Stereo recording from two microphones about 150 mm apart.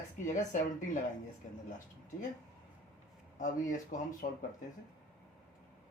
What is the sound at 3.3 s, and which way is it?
Speech, 60° left (ahead or behind).